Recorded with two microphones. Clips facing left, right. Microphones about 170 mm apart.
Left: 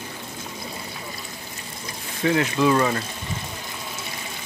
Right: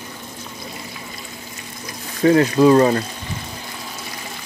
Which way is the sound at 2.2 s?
40° right (ahead or behind).